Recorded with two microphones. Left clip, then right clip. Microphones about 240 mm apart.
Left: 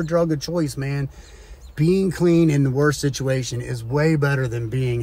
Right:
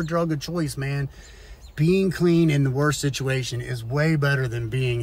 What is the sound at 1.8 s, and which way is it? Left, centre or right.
Speech, centre.